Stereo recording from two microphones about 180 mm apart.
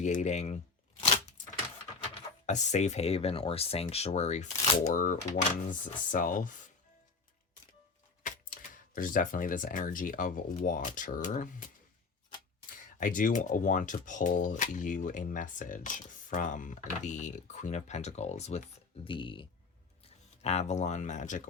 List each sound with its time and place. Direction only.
0.0 s speech: 40° left (ahead or behind)
2.5 s speech: 40° left (ahead or behind)
8.2 s speech: 45° left (ahead or behind)
12.7 s speech: 50° left (ahead or behind)